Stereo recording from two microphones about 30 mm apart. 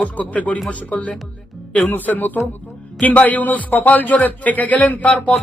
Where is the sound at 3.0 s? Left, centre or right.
Left.